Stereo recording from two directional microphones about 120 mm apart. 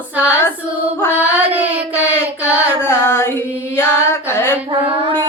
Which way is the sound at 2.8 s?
20° left (ahead or behind).